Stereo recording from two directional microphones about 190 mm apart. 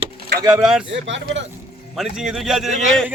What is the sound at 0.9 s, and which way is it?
Speech, 70° right (ahead or behind).